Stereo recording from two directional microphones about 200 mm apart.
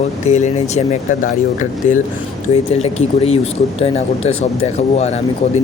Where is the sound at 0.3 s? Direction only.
35° left (ahead or behind).